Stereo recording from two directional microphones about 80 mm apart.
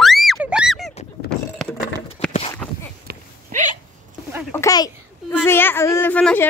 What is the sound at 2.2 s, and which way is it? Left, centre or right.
Horse, centre.